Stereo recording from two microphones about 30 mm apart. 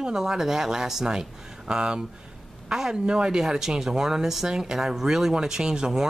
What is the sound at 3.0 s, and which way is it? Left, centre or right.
Speech, right.